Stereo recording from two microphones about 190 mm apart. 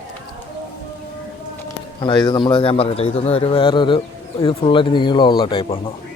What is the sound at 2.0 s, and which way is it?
Speech, 25° left (ahead or behind).